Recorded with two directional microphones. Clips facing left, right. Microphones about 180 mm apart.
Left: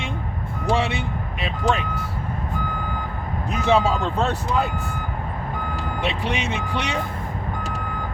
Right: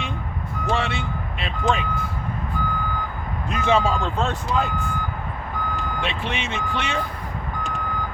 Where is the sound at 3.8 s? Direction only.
20° left (ahead or behind).